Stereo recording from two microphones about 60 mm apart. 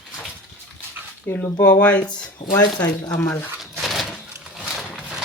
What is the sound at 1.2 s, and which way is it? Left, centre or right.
Speech, left.